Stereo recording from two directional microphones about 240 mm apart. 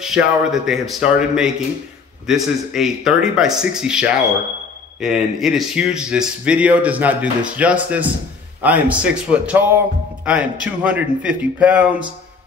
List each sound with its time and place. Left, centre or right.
0.0 s speech: centre